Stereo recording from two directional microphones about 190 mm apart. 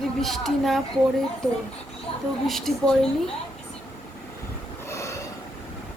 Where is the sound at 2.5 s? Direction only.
Centre (ahead or behind).